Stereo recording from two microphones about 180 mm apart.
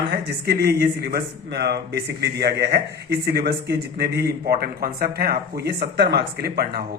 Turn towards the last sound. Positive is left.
turn(degrees=-60)  # may be behind; listen again after turning